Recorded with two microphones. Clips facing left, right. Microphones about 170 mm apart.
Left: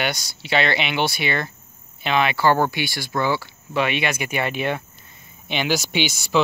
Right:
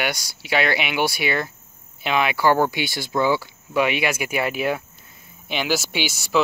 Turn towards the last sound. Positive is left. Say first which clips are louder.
# left 1 dB
turn(degrees=0)  # may be behind; listen again after turning